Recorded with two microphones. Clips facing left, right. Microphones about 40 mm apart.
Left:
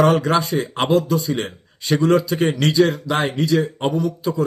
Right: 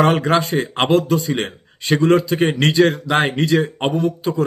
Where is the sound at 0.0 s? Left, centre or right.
Right.